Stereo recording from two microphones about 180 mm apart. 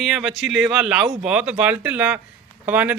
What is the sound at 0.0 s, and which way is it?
A man's voice, centre (ahead or behind).